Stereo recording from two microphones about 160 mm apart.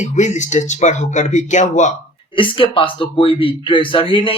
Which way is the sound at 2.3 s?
30° left (ahead or behind).